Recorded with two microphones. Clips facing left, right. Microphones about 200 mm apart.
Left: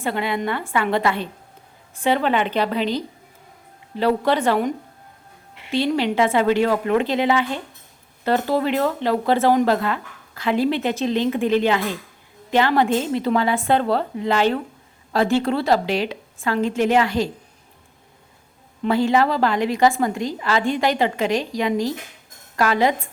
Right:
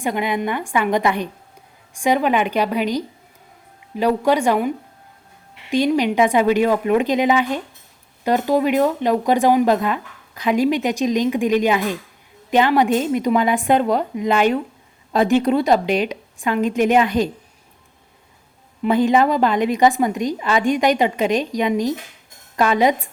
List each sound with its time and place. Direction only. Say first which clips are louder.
0.0 s speech: right 2 dB; 15° right (ahead or behind)
5.7 s speech: right 3 dB; 15° right (ahead or behind)
18.9 s a woman's voice: right 2 dB; 20° right (ahead or behind)